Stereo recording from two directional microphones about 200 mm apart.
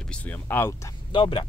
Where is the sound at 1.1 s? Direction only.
25° left (ahead or behind).